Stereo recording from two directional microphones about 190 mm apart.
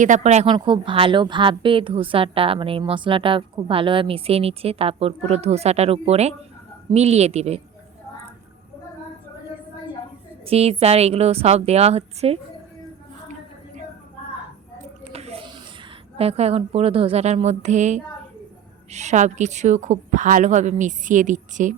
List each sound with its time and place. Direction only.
0.0 s a woman's voice: 40° right (ahead or behind)
0.5 s a woman's voice: 25° right (ahead or behind)
10.4 s a woman's voice: 30° right (ahead or behind)
15.1 s a sound: 35° right (ahead or behind)
16.1 s a woman's voice: 30° right (ahead or behind)